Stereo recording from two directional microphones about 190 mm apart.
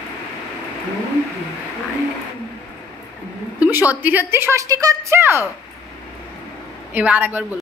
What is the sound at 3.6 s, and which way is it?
A woman's voice, 10° right (ahead or behind).